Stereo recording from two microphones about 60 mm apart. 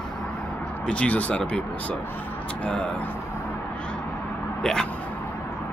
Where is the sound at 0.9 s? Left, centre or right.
Left.